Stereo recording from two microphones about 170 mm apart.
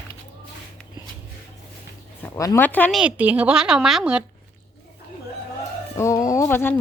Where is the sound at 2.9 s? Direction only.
5° right (ahead or behind).